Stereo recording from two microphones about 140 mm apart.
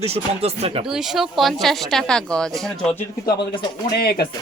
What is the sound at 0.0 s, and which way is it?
Speech, 45° right (ahead or behind).